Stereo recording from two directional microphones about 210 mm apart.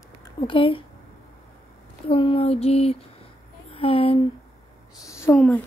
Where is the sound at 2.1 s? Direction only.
25° left (ahead or behind).